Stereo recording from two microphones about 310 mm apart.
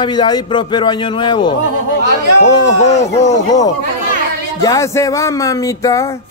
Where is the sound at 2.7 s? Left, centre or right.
Left.